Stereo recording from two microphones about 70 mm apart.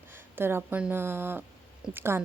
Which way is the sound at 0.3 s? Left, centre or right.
Right.